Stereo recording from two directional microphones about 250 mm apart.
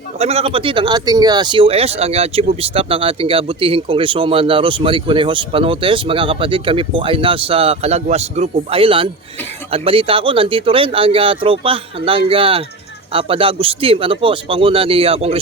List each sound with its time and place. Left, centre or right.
0.2 s speech: right